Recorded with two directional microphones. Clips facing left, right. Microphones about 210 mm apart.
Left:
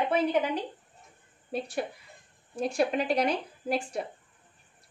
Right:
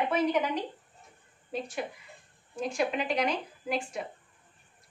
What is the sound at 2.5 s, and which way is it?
A woman's voice, 35° left (ahead or behind).